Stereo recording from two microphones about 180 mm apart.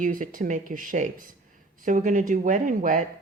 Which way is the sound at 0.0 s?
50° right (ahead or behind).